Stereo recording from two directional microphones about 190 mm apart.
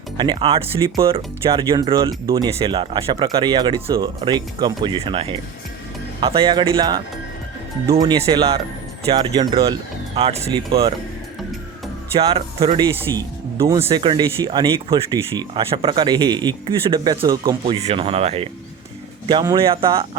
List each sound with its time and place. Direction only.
0.2 s speech: 25° right (ahead or behind)
12.1 s speech: 30° right (ahead or behind)
17.7 s speech: 30° right (ahead or behind)